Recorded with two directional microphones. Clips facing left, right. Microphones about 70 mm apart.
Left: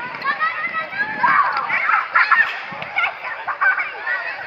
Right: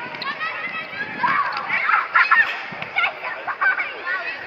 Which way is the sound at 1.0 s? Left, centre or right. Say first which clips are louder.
Left 7 dB; left.